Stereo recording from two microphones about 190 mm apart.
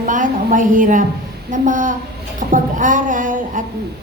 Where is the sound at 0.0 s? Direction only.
45° right (ahead or behind).